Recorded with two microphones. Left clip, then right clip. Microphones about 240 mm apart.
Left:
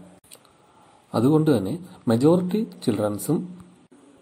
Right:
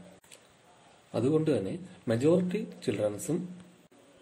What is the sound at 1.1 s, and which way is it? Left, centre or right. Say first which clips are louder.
Speech: left 8 dB; left.